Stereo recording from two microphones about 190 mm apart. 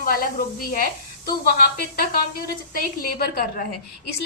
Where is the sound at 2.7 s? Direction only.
50° left (ahead or behind).